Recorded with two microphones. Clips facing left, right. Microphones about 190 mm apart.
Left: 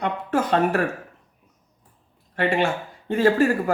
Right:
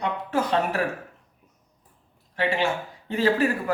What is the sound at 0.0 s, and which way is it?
Speech, 50° left (ahead or behind).